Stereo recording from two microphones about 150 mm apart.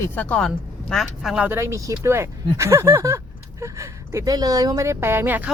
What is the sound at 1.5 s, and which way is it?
Speech, 15° right (ahead or behind).